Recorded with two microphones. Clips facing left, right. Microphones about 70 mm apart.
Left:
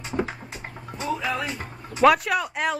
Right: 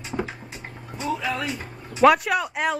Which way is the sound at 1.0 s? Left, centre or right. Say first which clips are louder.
Even; centre.